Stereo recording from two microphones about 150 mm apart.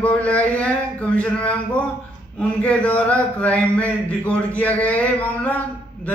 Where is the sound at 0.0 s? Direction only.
10° left (ahead or behind).